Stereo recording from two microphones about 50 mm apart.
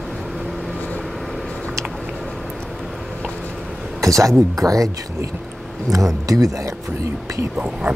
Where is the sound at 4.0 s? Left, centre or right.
Right.